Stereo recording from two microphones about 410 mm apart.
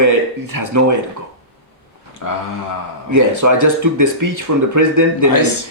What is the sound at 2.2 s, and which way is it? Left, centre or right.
Speech, left.